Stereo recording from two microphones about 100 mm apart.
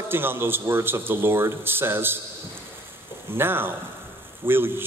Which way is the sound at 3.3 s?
20° right (ahead or behind).